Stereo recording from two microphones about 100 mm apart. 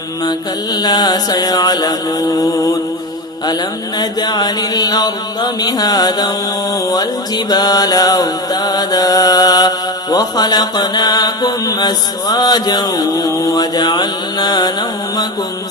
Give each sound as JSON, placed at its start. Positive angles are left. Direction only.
{"t": 0.3, "sound": "music", "side_deg": 45}
{"t": 3.4, "sound": "music", "side_deg": 40}